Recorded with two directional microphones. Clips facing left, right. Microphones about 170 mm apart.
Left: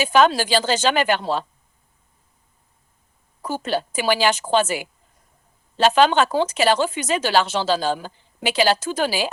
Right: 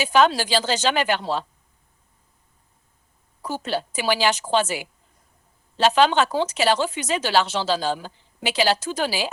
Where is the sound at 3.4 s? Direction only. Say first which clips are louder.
Left 2 dB; 50° left (ahead or behind).